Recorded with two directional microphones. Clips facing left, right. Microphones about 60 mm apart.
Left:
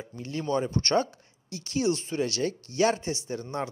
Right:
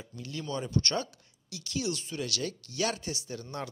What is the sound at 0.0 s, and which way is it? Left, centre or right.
Speech, left.